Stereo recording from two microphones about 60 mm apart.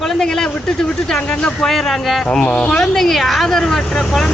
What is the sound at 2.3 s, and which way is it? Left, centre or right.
Speech, centre.